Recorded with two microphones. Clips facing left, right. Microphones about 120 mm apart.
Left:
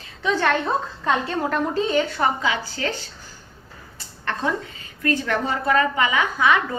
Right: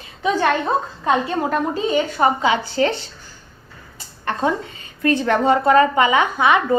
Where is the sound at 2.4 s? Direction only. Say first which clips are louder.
Right 7 dB; 25° right (ahead or behind).